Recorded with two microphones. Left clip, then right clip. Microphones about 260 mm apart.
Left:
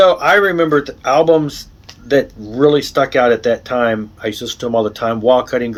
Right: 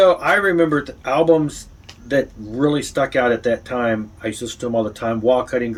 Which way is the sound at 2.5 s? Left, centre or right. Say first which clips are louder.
Left 7 dB; centre.